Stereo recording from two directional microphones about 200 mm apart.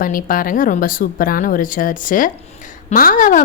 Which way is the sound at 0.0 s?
45° left (ahead or behind).